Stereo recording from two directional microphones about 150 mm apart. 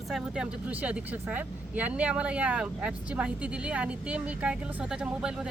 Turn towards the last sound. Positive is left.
turn(degrees=-5)  # may be behind; listen again after turning